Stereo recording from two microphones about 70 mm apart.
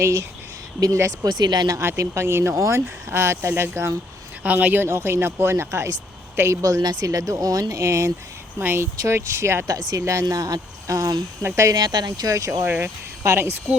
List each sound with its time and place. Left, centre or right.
0.0 s speech: right
1.2 s speech: right
1.8 s speech: right
4.4 s speech: right
6.6 s speech: right
7.8 s speech: right
8.5 s speech: right
9.0 s speech: right
9.6 s speech: right
10.2 s speech: right
11.7 s speech: right
12.6 s speech: right